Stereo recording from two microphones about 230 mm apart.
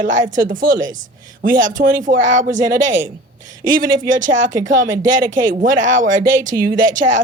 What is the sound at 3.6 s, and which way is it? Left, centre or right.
Speech, right.